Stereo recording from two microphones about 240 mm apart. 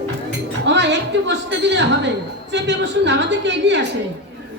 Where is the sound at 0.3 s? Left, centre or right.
Right.